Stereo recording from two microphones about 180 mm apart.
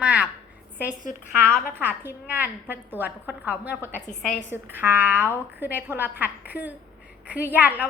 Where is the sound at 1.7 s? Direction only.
10° right (ahead or behind).